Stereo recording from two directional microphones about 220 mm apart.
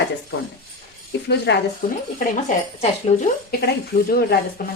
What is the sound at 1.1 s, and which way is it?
Speech, 50° left (ahead or behind).